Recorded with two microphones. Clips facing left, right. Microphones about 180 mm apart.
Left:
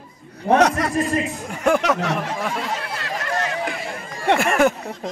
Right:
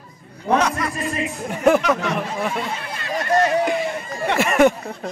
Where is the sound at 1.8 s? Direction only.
75° left (ahead or behind).